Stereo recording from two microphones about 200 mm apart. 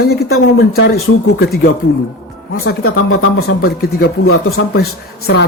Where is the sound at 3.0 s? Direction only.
80° left.